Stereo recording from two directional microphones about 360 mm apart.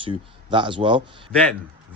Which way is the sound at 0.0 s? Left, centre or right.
Centre.